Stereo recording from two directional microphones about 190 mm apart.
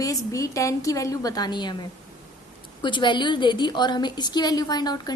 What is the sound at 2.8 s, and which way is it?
A woman's voice, 25° left (ahead or behind).